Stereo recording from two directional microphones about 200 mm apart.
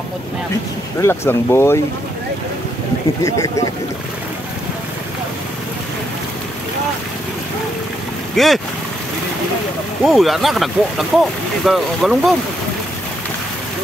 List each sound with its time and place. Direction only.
1.0 s speech: 15° left (ahead or behind)
3.3 s speech: 15° left (ahead or behind)
8.4 s speech: centre (ahead or behind)
10.0 s speech: centre (ahead or behind)